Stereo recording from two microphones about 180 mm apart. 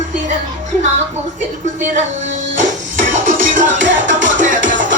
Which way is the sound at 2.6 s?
45° right (ahead or behind).